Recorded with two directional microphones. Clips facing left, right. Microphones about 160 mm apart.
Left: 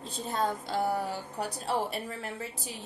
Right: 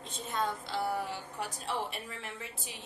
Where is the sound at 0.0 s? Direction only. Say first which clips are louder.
Left 4 dB; 35° left (ahead or behind).